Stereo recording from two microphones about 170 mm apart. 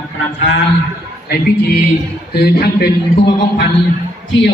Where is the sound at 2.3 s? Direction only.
65° left (ahead or behind).